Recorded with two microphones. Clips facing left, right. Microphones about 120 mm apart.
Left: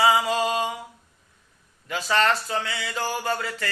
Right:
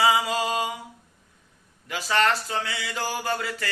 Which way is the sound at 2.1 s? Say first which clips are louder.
Left 1 dB; 30° left (ahead or behind).